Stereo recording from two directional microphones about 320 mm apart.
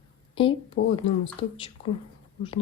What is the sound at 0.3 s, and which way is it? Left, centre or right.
A woman's voice, centre.